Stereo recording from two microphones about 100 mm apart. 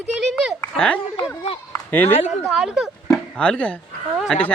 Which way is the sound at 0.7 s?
10° left (ahead or behind).